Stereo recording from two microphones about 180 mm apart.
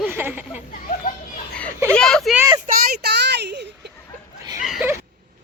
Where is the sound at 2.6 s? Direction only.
55° right (ahead or behind).